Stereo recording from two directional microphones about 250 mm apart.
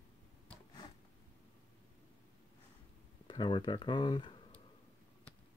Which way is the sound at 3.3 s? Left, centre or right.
Centre.